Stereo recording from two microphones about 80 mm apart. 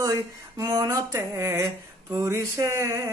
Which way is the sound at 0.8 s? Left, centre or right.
Right.